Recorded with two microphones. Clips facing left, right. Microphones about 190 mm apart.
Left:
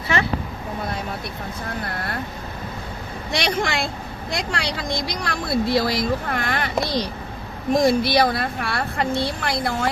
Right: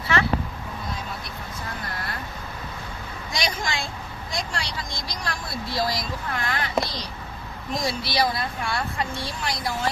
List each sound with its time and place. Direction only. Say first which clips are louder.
3.3 s a woman's voice: left 6 dB; 65° left (ahead or behind)
7.7 s speech: left 10 dB; 55° left (ahead or behind)